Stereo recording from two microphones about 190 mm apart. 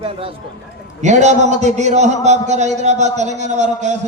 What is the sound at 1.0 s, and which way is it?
A man's voice, 40° right (ahead or behind).